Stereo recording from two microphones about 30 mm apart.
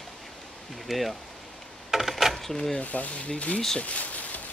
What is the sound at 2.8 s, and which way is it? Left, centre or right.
Speech, left.